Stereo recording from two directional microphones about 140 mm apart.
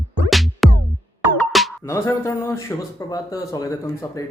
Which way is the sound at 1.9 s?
20° left (ahead or behind).